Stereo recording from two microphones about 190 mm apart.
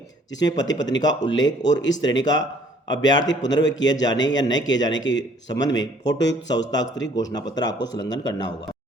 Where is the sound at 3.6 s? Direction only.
75° left (ahead or behind).